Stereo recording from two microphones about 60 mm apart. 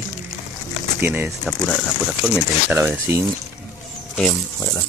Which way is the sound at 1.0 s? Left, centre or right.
Right.